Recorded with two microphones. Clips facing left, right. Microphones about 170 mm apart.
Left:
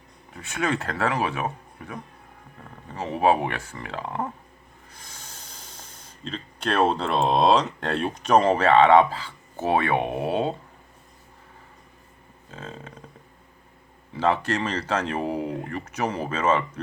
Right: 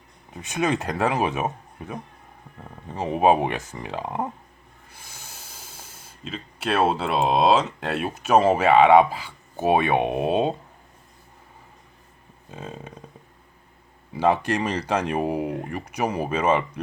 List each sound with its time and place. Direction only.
0.3 s speech: 20° right (ahead or behind)
4.9 s speech: 5° right (ahead or behind)
12.5 s speech: 15° right (ahead or behind)
14.1 s speech: 15° right (ahead or behind)